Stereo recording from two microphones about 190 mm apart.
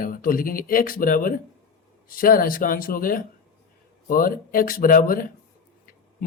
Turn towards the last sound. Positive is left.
turn(degrees=45)  # may be behind; listen again after turning